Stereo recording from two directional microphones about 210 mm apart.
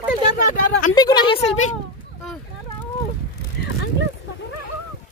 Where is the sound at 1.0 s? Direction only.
20° left (ahead or behind).